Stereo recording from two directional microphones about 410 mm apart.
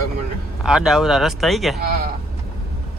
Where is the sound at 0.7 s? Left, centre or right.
Centre.